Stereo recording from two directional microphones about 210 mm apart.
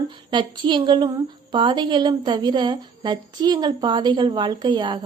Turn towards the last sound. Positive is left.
turn(degrees=-20)  # may be behind; listen again after turning